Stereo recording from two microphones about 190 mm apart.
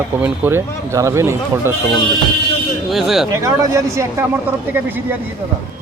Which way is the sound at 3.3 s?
15° right (ahead or behind).